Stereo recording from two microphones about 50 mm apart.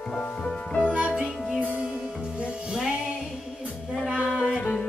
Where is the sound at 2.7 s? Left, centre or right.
Centre.